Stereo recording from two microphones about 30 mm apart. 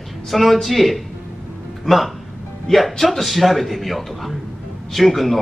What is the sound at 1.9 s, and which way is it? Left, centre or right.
Speech, left.